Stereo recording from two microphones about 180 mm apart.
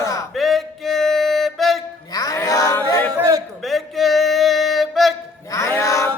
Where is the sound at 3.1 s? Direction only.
20° right (ahead or behind).